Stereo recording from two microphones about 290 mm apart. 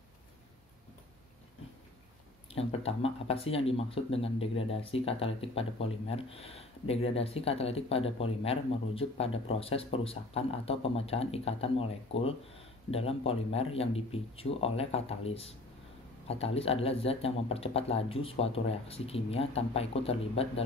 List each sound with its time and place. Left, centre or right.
2.5 s speech: centre